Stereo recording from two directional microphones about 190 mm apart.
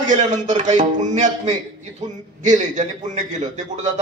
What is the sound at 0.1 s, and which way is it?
Speech, 40° right (ahead or behind).